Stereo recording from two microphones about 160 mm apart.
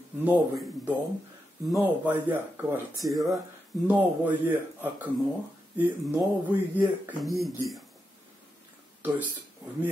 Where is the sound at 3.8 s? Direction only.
10° right (ahead or behind).